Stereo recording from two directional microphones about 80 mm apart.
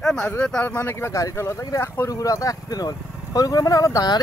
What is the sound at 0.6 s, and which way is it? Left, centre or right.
Speech, left.